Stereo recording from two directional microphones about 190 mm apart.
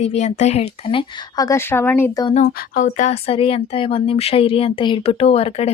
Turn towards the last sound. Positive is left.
turn(degrees=30)  # may be behind; listen again after turning